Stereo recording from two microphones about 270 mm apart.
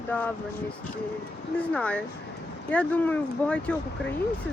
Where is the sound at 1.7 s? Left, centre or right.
Centre.